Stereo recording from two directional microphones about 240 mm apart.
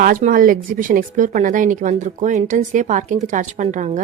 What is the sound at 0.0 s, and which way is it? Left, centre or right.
Speech, right.